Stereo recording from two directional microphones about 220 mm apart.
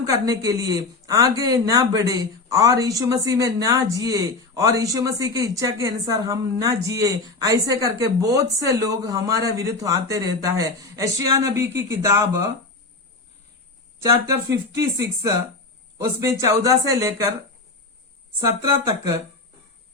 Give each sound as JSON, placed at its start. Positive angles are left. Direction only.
{"t": 0.0, "sound": "speech", "side_deg": -15}
{"t": 14.0, "sound": "speech", "side_deg": -15}
{"t": 18.4, "sound": "speech", "side_deg": -15}